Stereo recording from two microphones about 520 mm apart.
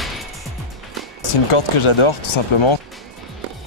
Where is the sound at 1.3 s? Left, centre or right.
Left.